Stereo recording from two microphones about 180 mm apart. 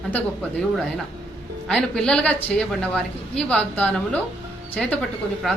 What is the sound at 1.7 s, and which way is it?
A woman's voice, 5° left (ahead or behind).